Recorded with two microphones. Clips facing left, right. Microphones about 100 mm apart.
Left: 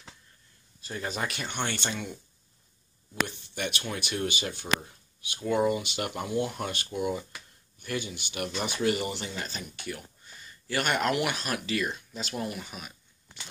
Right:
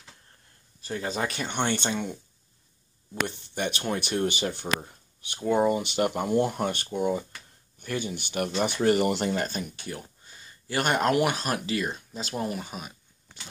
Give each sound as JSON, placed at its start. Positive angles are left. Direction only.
{"t": 1.0, "sound": "speech", "side_deg": -35}
{"t": 3.5, "sound": "speech", "side_deg": -40}
{"t": 9.8, "sound": "speech", "side_deg": -30}